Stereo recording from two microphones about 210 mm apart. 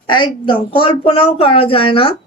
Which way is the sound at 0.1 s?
20° left (ahead or behind).